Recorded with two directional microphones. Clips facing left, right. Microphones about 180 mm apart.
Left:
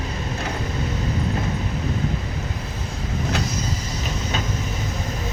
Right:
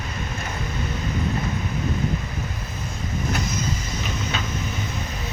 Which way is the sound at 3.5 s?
40° left (ahead or behind).